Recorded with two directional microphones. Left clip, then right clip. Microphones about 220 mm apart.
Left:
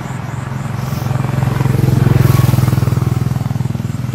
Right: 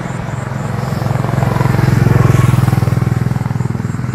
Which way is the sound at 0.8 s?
40° right (ahead or behind).